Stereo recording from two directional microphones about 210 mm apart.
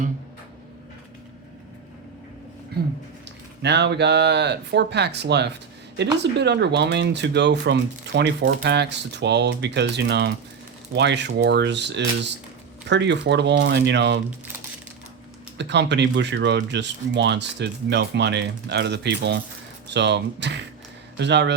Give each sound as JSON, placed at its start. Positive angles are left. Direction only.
{"t": 2.7, "sound": "a sound", "side_deg": -50}
{"t": 3.2, "sound": "speech", "side_deg": -55}
{"t": 15.5, "sound": "speech", "side_deg": -55}